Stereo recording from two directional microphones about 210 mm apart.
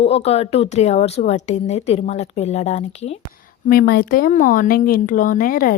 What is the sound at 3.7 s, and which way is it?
Speech, 45° left (ahead or behind).